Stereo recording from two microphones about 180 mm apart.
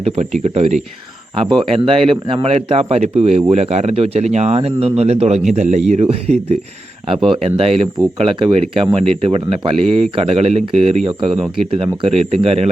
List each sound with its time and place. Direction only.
0.4 s speech: 35° right (ahead or behind)